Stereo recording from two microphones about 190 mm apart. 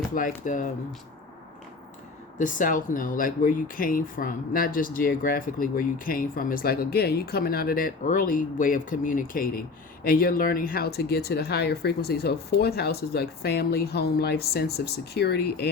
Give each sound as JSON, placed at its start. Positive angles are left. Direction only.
{"t": 0.1, "sound": "speech", "side_deg": 45}
{"t": 2.4, "sound": "speech", "side_deg": 45}